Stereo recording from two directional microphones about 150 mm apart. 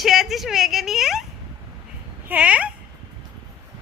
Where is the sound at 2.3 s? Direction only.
10° right (ahead or behind).